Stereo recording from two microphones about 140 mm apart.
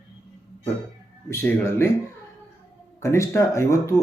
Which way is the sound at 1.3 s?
20° left (ahead or behind).